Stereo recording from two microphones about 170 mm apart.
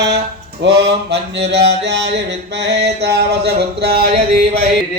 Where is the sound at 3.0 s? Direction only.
70° right (ahead or behind).